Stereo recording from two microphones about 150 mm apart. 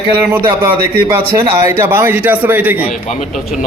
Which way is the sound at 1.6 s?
15° right (ahead or behind).